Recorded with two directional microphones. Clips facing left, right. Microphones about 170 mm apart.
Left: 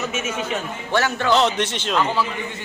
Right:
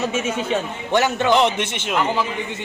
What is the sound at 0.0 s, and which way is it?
Speech, 30° right (ahead or behind).